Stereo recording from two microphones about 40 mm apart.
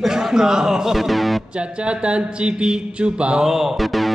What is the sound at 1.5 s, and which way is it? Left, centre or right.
A man's voice, right.